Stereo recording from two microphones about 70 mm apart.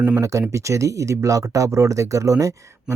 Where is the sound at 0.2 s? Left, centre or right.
Right.